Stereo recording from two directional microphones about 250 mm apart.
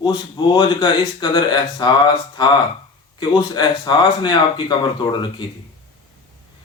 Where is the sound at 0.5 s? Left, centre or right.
Centre.